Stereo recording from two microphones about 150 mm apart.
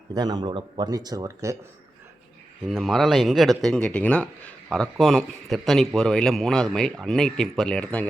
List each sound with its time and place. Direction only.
0.1 s speech: 25° right (ahead or behind)
2.6 s a man's voice: centre (ahead or behind)